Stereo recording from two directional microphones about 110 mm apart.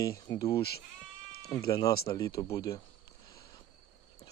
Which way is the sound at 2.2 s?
30° left (ahead or behind).